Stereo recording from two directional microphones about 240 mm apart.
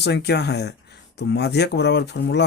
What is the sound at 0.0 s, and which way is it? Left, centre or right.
Speech, left.